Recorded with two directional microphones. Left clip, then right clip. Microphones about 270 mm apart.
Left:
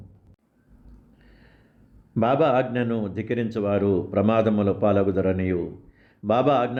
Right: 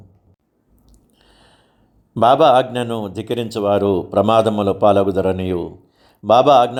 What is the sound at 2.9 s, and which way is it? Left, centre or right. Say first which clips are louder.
Speech: right 4 dB; centre.